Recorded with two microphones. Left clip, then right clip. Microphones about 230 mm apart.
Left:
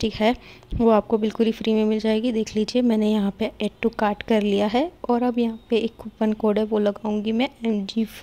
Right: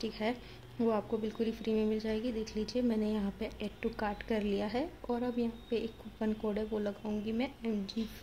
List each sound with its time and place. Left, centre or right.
0.0 s a woman's voice: left